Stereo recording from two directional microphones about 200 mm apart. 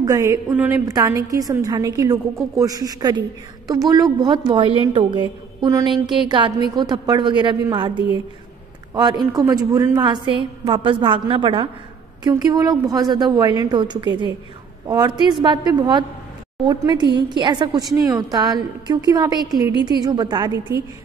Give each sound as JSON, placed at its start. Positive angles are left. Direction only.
{"t": 0.0, "sound": "a woman's voice", "side_deg": -15}